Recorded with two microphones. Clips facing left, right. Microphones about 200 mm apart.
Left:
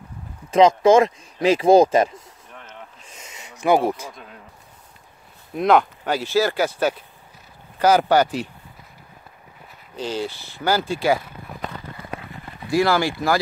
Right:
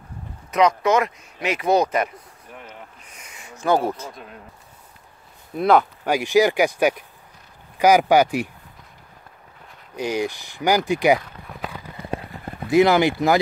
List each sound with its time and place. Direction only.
0.5 s speech: 25° left (ahead or behind)
3.0 s a sound: 25° left (ahead or behind)
4.1 s speech: centre (ahead or behind)
5.6 s speech: 5° right (ahead or behind)
9.9 s speech: 15° right (ahead or behind)
11.1 s speech: 5° left (ahead or behind)
12.0 s a sound: 30° right (ahead or behind)
12.6 s speech: 20° right (ahead or behind)